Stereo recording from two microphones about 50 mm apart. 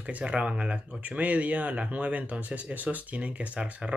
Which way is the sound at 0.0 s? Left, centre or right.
Right.